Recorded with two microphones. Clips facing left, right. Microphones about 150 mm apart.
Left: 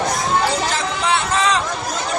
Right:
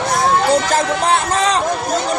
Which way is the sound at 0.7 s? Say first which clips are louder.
Right 5 dB; 45° right (ahead or behind).